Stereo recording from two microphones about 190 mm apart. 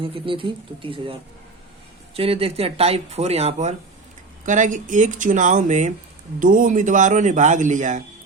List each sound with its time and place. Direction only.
0.0 s speech: 30° right (ahead or behind)
2.1 s speech: 30° right (ahead or behind)